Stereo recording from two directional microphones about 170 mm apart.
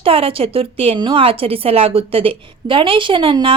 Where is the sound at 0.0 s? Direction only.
35° right (ahead or behind).